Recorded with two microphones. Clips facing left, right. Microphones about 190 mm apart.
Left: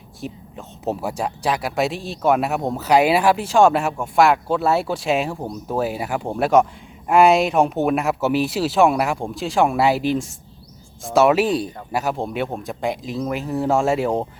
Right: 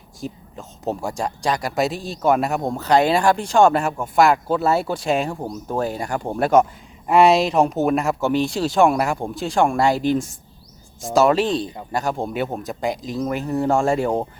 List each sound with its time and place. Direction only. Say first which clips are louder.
0.2 s speech: even; 5° left (ahead or behind)